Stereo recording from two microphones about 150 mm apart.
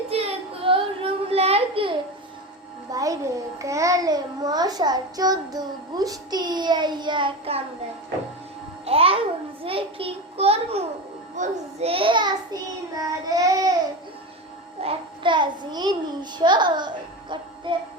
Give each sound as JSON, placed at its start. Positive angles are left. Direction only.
{"t": 0.1, "sound": "female singing", "side_deg": -40}
{"t": 0.6, "sound": "a sound", "side_deg": -35}
{"t": 2.9, "sound": "a sound", "side_deg": -25}
{"t": 3.6, "sound": "a child's voice", "side_deg": -20}
{"t": 8.8, "sound": "babbling", "side_deg": -40}
{"t": 9.6, "sound": "a child's voice", "side_deg": -40}
{"t": 13.0, "sound": "a child's voice", "side_deg": -25}
{"t": 14.8, "sound": "a child's voice", "side_deg": -35}